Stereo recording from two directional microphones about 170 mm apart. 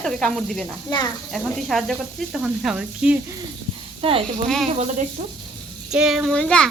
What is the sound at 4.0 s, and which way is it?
Speech, 35° right (ahead or behind).